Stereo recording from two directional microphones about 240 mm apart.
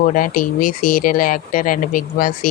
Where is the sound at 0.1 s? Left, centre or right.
Left.